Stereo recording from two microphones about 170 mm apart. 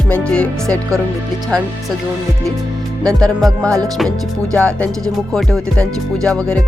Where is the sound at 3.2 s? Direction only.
Centre (ahead or behind).